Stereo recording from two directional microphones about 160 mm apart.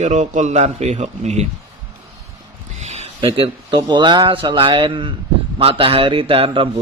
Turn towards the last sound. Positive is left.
turn(degrees=-35)  # may be behind; listen again after turning